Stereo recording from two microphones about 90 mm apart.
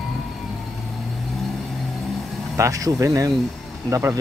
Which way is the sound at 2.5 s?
35° right (ahead or behind).